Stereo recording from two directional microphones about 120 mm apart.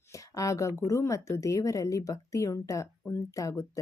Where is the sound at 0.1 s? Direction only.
30° left (ahead or behind).